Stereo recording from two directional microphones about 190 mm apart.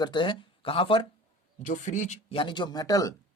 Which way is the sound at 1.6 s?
40° left (ahead or behind).